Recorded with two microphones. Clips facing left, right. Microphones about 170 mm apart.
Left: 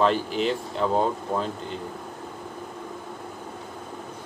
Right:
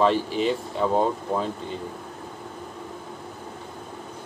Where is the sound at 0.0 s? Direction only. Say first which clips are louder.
Right 1 dB; centre (ahead or behind).